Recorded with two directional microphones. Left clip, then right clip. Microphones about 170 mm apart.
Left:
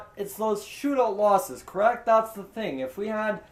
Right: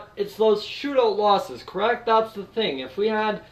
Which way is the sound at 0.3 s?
45° left (ahead or behind).